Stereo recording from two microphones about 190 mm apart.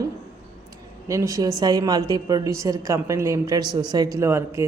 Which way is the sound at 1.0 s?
15° right (ahead or behind).